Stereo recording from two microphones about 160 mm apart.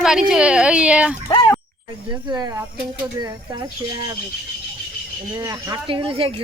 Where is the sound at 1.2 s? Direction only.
20° left (ahead or behind).